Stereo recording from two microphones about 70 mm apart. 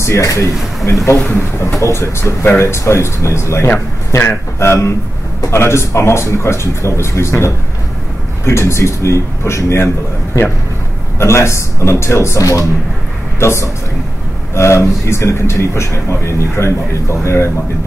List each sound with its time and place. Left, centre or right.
0.0 s a man's voice: left
11.1 s a man's voice: left
13.4 s a man's voice: left